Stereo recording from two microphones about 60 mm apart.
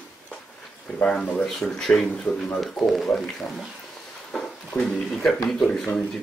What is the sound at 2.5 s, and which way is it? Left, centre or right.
Speech, centre.